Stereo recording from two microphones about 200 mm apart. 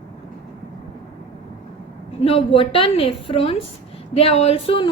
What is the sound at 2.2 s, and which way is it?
A woman's voice, 30° left (ahead or behind).